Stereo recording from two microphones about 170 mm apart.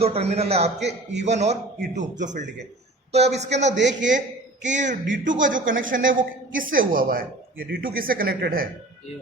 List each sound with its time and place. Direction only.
0.0 s a man's voice: 35° right (ahead or behind)
0.8 s a man's voice: 90° right
1.2 s a man's voice: 40° right (ahead or behind); by 8.6 s 60° right (ahead or behind)